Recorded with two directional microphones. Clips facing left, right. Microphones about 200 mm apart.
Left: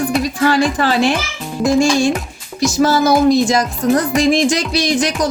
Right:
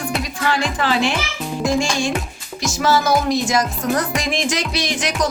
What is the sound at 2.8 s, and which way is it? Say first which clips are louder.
Music: left 5 dB; 35° left (ahead or behind).